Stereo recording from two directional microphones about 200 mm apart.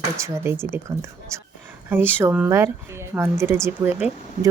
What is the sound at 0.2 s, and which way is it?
Speech, 10° right (ahead or behind).